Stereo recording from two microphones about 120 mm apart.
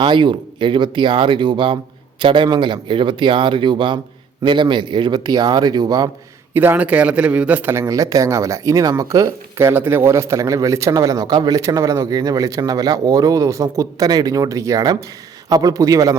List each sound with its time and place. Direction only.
0.0 s speech: 45° right (ahead or behind)
6.5 s a man's voice: 15° right (ahead or behind)